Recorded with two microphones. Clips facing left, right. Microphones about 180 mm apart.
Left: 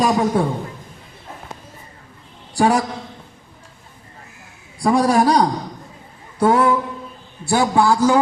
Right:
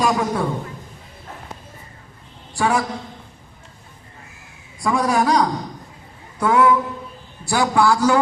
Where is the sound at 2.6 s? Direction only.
35° left (ahead or behind).